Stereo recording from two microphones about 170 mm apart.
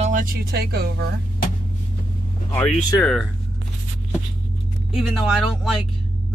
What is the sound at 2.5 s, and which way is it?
Speech, 5° left (ahead or behind).